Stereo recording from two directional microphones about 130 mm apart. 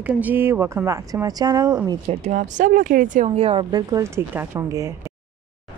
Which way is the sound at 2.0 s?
65° right (ahead or behind).